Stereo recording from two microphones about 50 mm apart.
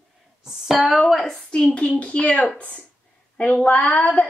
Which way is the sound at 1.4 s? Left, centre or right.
Left.